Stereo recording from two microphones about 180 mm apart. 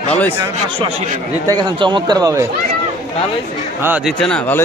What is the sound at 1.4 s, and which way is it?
Speech, 25° right (ahead or behind).